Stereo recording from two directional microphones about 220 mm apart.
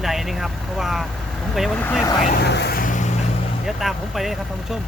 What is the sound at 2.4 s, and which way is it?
Vehicle, 50° left (ahead or behind).